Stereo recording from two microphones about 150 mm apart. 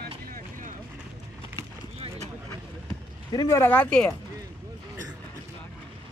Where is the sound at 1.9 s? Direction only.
45° right (ahead or behind).